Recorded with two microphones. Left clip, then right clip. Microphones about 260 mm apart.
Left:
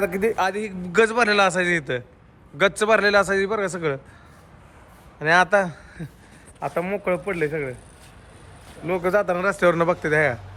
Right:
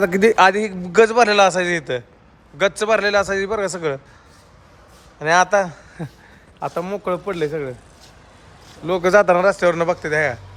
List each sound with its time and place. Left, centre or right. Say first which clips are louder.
0.0 s speech: right 8 dB; right
0.9 s a man's voice: right 5 dB; centre
5.2 s a man's voice: right 2 dB; centre
6.6 s speech: right 1 dB; centre
8.9 s speech: right 7 dB; right
9.4 s a man's voice: right 3 dB; centre